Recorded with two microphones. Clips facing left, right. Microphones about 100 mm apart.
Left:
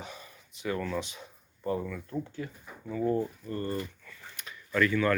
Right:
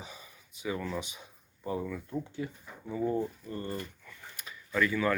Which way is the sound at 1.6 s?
10° right (ahead or behind).